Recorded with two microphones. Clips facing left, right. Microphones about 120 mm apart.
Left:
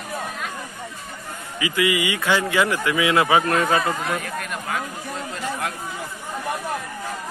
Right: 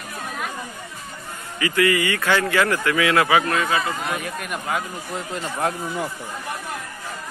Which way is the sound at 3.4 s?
40° left (ahead or behind).